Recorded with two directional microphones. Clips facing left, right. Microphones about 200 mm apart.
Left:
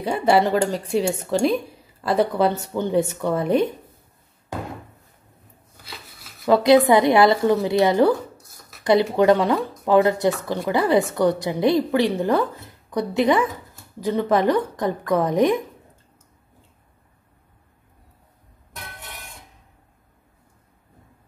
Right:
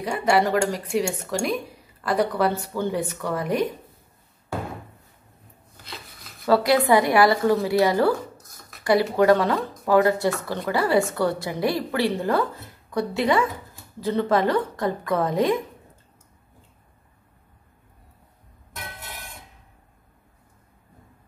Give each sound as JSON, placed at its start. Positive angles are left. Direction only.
{"t": 0.0, "sound": "a woman's voice", "side_deg": 30}
{"t": 6.4, "sound": "a woman's voice", "side_deg": 20}